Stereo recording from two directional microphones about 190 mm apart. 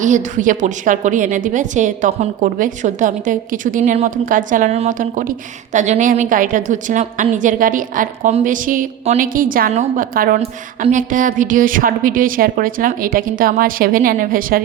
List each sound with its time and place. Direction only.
0.0 s a woman's voice: 40° right (ahead or behind)